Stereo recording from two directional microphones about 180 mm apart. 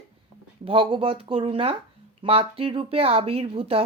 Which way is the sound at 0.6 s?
30° right (ahead or behind).